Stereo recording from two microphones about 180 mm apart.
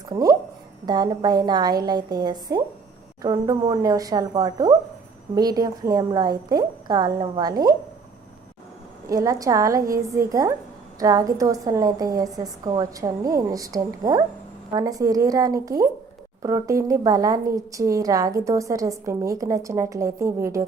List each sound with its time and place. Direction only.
0.1 s a woman's voice: 20° right (ahead or behind)
9.0 s a woman's voice: 20° right (ahead or behind)